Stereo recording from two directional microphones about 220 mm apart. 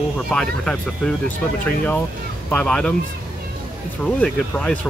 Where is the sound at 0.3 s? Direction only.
5° left (ahead or behind).